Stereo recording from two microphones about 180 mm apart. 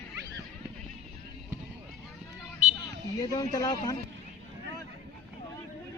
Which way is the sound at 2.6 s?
45° right (ahead or behind).